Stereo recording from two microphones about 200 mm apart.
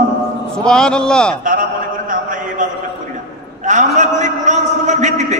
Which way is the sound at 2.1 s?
40° right (ahead or behind).